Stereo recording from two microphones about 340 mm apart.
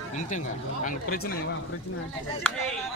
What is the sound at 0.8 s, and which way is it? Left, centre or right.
Speech, left.